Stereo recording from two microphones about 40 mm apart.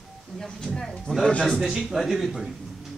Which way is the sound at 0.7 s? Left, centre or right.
Centre.